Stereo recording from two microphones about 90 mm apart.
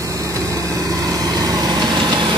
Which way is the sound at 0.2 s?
40° right (ahead or behind).